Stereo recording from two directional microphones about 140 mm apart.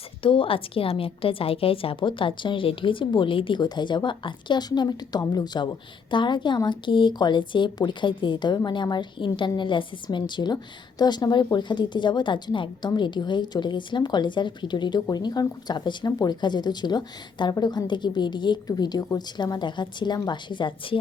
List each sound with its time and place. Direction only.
0.2 s speech: 40° left (ahead or behind)